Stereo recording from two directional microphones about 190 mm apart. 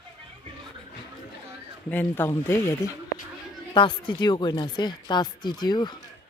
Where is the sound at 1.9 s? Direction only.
10° left (ahead or behind).